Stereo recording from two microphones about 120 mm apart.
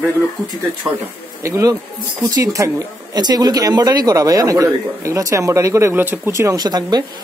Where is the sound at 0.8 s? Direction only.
25° right (ahead or behind).